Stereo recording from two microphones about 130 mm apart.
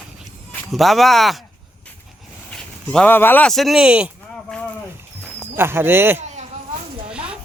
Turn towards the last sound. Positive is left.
turn(degrees=-10)  # may be behind; listen again after turning